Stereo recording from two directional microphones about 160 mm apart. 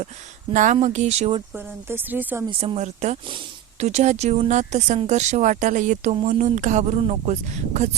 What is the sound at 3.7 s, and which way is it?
Speech, 45° right (ahead or behind).